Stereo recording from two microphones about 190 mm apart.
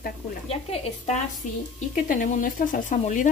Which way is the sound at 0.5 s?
30° left (ahead or behind).